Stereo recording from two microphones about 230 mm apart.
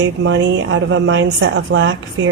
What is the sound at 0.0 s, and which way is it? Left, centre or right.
A woman's voice, right.